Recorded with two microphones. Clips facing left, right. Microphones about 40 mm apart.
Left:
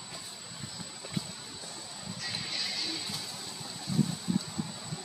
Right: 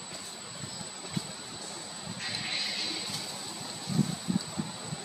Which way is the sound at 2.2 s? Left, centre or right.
Right.